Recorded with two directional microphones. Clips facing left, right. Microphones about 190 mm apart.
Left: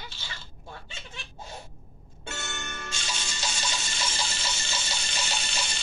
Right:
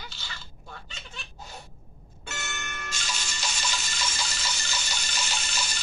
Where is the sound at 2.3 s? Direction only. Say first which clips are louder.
Left 1 dB; 30° left (ahead or behind).